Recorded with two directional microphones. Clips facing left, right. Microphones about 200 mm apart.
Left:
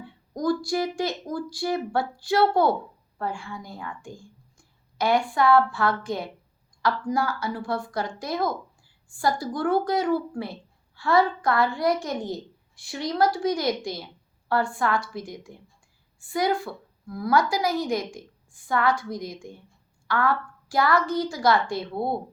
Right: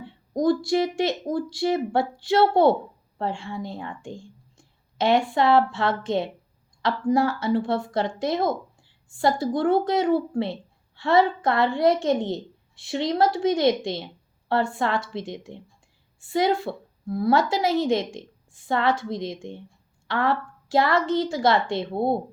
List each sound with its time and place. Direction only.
0.0 s speech: 25° right (ahead or behind)